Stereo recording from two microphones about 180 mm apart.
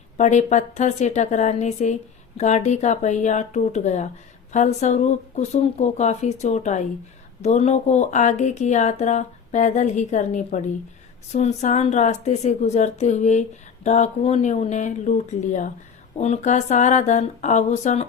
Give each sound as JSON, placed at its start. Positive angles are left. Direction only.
{"t": 0.2, "sound": "speech", "side_deg": 40}